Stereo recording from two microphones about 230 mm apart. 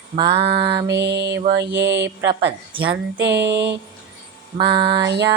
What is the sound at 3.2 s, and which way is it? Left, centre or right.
Mantra, right.